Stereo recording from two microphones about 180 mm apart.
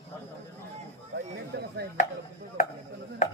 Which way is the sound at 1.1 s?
70° right (ahead or behind).